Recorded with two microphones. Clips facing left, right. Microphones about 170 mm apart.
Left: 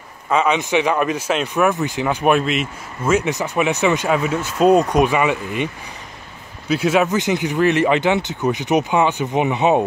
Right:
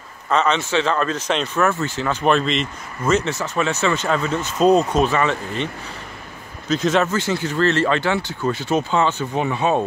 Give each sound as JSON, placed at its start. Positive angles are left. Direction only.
{"t": 0.3, "sound": "speech", "side_deg": 10}
{"t": 6.7, "sound": "speech", "side_deg": 10}